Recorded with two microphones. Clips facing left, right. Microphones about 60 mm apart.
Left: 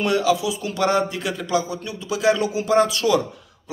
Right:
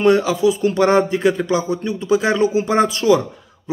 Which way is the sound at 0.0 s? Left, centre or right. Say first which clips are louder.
Right 6 dB; right.